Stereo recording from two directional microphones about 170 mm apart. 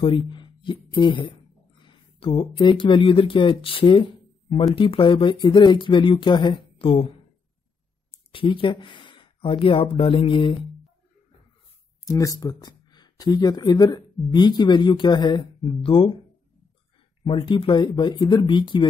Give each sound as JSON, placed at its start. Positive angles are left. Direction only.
{"t": 0.0, "sound": "speech", "side_deg": 30}
{"t": 3.8, "sound": "a sound", "side_deg": 30}
{"t": 4.7, "sound": "speech", "side_deg": 30}
{"t": 8.1, "sound": "speech", "side_deg": 30}
{"t": 12.0, "sound": "speech", "side_deg": 20}
{"t": 17.2, "sound": "speech", "side_deg": 30}